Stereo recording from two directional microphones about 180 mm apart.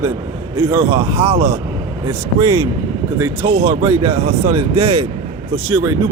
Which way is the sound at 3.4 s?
20° right (ahead or behind).